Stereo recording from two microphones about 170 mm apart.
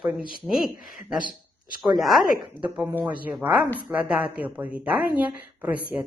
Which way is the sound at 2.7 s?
10° right (ahead or behind).